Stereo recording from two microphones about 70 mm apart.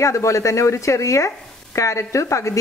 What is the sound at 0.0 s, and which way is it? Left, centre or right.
Speech, left.